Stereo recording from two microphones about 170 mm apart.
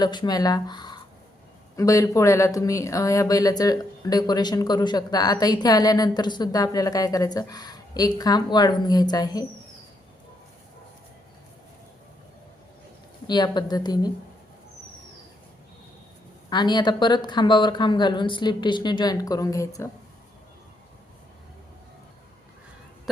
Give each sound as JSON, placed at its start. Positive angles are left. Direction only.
{"t": 0.0, "sound": "speech", "side_deg": 25}
{"t": 13.2, "sound": "speech", "side_deg": 25}
{"t": 16.5, "sound": "speech", "side_deg": 25}